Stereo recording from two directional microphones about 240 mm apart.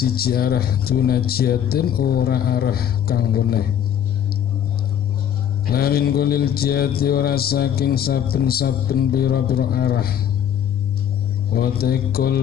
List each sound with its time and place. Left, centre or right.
0.0 s mantra: left
5.7 s mantra: left
11.5 s mantra: left